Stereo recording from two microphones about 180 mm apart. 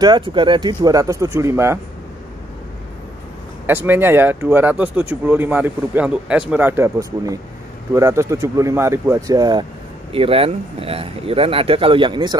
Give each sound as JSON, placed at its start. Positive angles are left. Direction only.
{"t": 0.0, "sound": "speech", "side_deg": -25}
{"t": 3.6, "sound": "speech", "side_deg": -10}